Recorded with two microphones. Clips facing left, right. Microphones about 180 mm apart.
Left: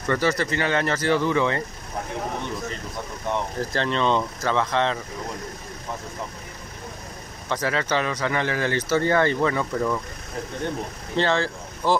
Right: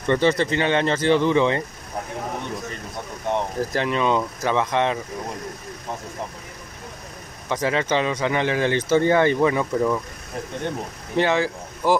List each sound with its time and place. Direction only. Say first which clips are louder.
0.0 s speech: right 4 dB; 20° right (ahead or behind)
3.7 s speech: right 1 dB; 10° right (ahead or behind)
7.4 s speech: right 3 dB; 15° right (ahead or behind)
11.1 s speech: right 2 dB; 15° right (ahead or behind)